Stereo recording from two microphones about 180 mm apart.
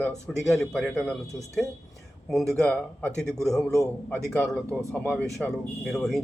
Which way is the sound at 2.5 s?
5° left (ahead or behind).